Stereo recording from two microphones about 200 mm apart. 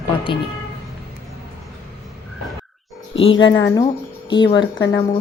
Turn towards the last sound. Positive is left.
turn(degrees=20)  # may be behind; listen again after turning